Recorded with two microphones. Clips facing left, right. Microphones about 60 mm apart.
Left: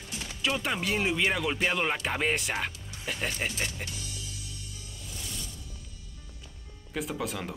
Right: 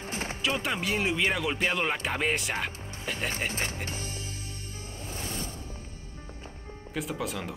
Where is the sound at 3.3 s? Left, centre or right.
Right.